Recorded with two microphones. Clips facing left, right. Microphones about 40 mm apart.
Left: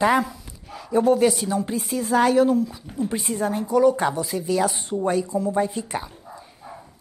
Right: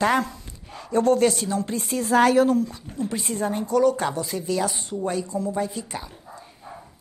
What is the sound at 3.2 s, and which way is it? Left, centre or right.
Speech, centre.